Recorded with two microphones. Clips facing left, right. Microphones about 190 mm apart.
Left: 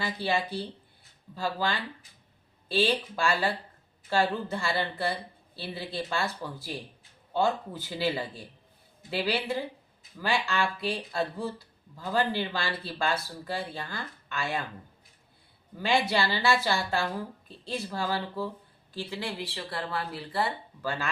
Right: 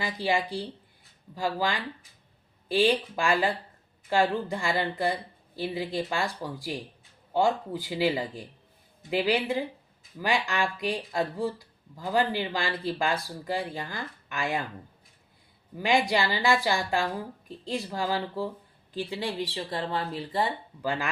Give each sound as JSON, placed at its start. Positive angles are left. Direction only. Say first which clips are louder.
{"t": 0.0, "sound": "speech", "louder": "right 2 dB", "side_deg": -15}
{"t": 15.8, "sound": "speech", "louder": "right 2 dB", "side_deg": -15}